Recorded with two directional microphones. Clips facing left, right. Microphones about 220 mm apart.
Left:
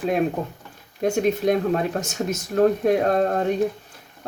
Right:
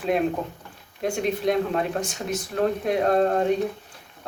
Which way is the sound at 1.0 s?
45° left (ahead or behind).